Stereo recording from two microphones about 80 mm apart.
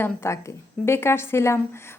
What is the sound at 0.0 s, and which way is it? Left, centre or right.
A woman's voice, left.